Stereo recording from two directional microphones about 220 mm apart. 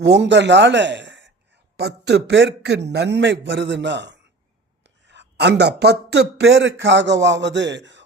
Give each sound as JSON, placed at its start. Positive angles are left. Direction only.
{"t": 0.0, "sound": "speech", "side_deg": -55}